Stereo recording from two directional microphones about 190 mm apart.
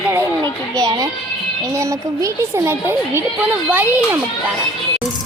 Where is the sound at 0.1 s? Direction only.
15° right (ahead or behind).